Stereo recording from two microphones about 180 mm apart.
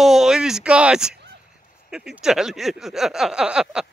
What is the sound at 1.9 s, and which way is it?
Speech, 5° right (ahead or behind).